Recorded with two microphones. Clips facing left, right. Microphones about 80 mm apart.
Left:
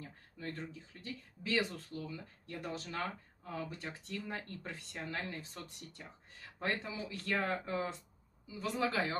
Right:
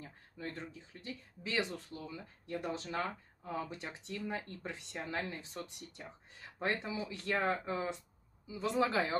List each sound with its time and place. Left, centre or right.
0.4 s speech: right